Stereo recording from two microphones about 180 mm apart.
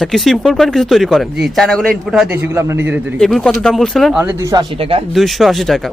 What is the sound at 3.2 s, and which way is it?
Speech, centre (ahead or behind).